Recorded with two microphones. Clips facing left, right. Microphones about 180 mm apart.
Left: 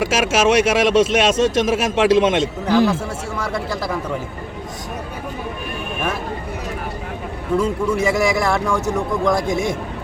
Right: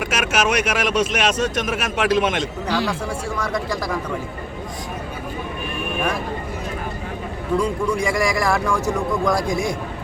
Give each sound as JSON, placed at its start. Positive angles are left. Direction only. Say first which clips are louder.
{"t": 0.0, "sound": "speech", "louder": "left 5 dB", "side_deg": 25}
{"t": 7.6, "sound": "a man's voice", "louder": "left 4 dB", "side_deg": 5}